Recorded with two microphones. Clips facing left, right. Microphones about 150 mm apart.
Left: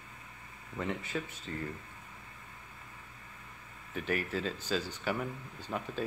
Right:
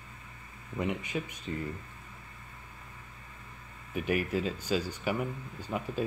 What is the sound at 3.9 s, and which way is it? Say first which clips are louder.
Speech: right 4 dB; 10° right (ahead or behind).